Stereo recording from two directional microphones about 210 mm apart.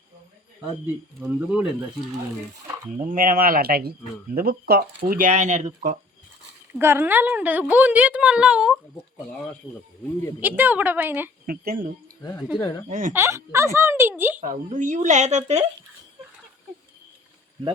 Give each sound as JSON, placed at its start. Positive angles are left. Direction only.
{"t": 1.2, "sound": "speech", "side_deg": -5}
{"t": 3.0, "sound": "speech", "side_deg": -40}
{"t": 6.7, "sound": "speech", "side_deg": -10}
{"t": 10.6, "sound": "speech", "side_deg": -10}
{"t": 11.4, "sound": "speech", "side_deg": -45}
{"t": 12.5, "sound": "speech", "side_deg": 20}
{"t": 12.9, "sound": "speech", "side_deg": -40}
{"t": 13.1, "sound": "speech", "side_deg": -10}
{"t": 14.4, "sound": "speech", "side_deg": -35}